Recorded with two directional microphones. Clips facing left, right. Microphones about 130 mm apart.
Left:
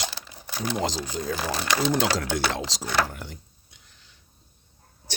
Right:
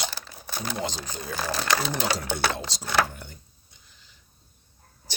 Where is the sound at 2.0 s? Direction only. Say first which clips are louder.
Left 3 dB; 90° left.